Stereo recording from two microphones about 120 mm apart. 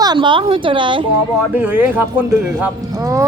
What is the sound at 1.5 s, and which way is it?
Speech, 15° right (ahead or behind).